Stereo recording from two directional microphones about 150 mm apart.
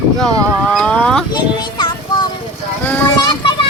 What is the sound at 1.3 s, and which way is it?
Music, 30° left (ahead or behind).